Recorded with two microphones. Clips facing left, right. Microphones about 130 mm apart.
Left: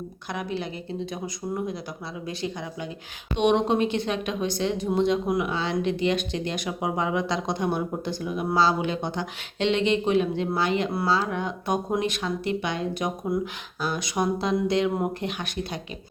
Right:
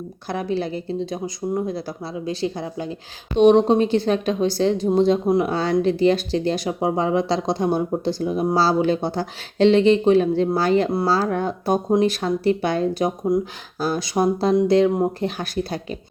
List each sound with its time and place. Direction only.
0.3 s speech: 35° right (ahead or behind)
5.5 s speech: 40° right (ahead or behind)